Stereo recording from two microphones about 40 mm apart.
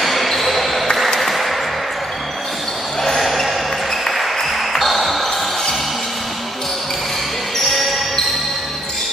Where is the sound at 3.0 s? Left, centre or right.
Centre.